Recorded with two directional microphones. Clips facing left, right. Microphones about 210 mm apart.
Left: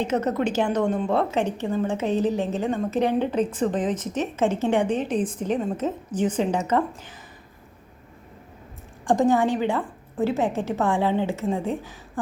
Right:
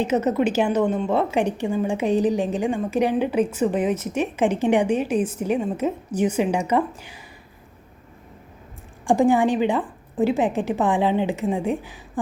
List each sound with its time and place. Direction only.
0.0 s a woman's voice: 5° right (ahead or behind)
9.0 s a woman's voice: 15° right (ahead or behind)